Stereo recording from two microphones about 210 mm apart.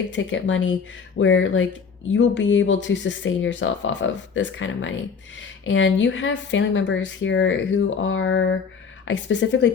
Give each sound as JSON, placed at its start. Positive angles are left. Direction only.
{"t": 0.1, "sound": "speech", "side_deg": 60}